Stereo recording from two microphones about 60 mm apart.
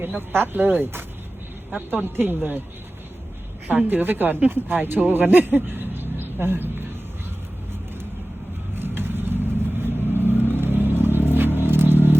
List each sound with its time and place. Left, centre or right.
0.2 s a woman's voice: right
3.7 s a woman's voice: right
8.7 s vehicle: right